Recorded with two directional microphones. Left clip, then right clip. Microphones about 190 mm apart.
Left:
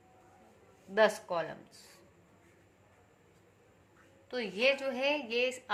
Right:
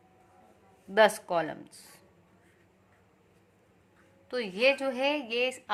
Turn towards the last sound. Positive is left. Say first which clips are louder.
# right 2 dB
turn(degrees=-25)  # may be behind; listen again after turning